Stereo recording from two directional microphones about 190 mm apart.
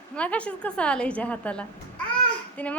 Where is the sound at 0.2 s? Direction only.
5° left (ahead or behind).